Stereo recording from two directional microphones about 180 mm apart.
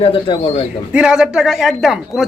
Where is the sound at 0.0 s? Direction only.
30° left (ahead or behind).